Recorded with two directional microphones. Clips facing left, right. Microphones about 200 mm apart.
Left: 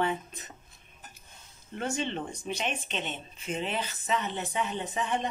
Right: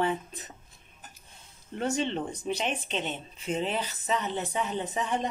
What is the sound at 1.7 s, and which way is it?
Speech, 35° right (ahead or behind).